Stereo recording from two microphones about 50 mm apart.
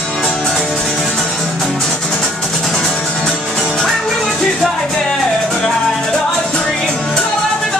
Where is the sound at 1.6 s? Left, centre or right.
Centre.